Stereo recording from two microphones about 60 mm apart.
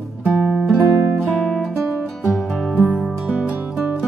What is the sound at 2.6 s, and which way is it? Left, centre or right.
Music, right.